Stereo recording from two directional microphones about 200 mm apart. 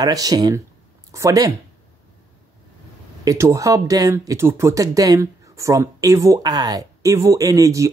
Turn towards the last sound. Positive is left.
turn(degrees=-15)  # may be behind; listen again after turning